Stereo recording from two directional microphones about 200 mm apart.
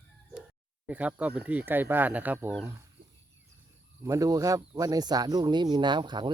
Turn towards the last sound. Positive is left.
turn(degrees=-20)  # may be behind; listen again after turning